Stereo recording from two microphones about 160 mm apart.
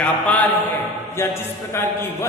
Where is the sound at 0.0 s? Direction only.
10° left (ahead or behind).